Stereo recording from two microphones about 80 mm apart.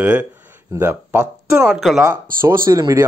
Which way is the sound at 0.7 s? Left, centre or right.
Right.